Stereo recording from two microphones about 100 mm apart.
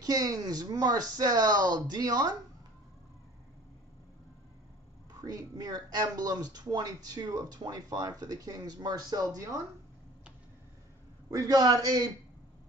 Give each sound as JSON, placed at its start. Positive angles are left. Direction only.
{"t": 0.0, "sound": "speech", "side_deg": -40}
{"t": 5.1, "sound": "speech", "side_deg": -45}
{"t": 11.2, "sound": "speech", "side_deg": -40}